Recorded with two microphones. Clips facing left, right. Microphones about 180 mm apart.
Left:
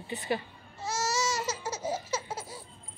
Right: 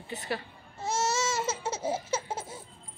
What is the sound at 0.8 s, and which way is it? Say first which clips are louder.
Laughter: right 2 dB; 25° right (ahead or behind).